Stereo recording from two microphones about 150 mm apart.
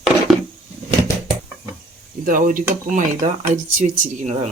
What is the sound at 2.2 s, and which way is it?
Speech, 65° right (ahead or behind).